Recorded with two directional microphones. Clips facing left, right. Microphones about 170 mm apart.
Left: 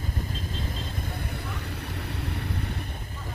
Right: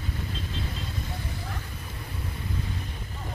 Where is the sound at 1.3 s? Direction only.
65° left (ahead or behind).